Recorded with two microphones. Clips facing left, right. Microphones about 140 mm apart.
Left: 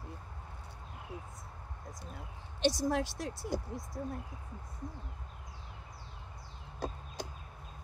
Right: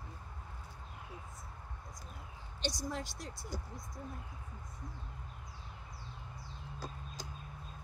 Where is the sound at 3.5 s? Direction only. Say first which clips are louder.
Left 8 dB; 80° left.